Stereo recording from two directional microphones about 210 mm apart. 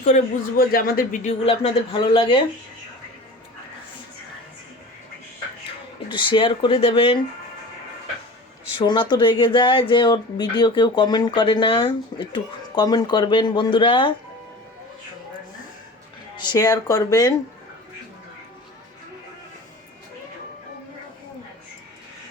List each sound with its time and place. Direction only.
0.0 s speech: 40° left (ahead or behind)
6.1 s speech: 20° left (ahead or behind)
8.8 s speech: 20° left (ahead or behind)
16.4 s speech: 20° left (ahead or behind)